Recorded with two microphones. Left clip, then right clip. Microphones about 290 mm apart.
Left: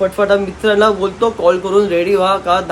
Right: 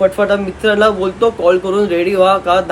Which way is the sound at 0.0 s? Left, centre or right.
Centre.